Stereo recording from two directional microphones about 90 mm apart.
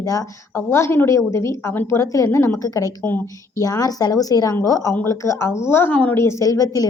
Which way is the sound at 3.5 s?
40° left (ahead or behind).